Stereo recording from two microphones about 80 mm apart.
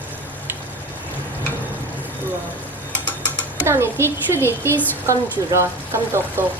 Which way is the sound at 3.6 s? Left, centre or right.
Right.